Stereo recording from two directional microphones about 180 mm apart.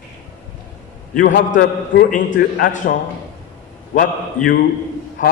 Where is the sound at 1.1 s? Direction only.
50° left (ahead or behind).